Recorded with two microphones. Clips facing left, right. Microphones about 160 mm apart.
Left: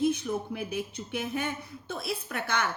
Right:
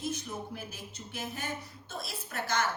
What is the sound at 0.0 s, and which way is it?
Speech, 60° left (ahead or behind).